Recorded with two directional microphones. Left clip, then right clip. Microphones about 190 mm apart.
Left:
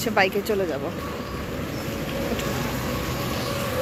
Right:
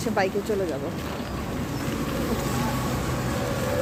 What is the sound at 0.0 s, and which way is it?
Speech, centre (ahead or behind).